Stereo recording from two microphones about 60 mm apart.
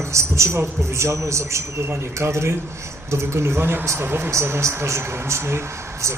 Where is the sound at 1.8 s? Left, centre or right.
Right.